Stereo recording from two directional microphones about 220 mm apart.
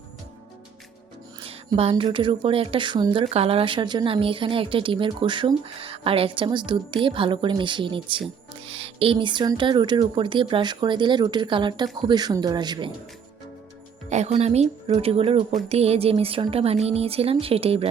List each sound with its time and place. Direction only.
1.4 s speech: 25° right (ahead or behind)
14.1 s speech: 30° right (ahead or behind)